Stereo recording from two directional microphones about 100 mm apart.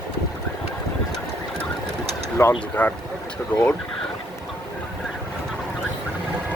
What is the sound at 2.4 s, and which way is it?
Speech, 20° left (ahead or behind).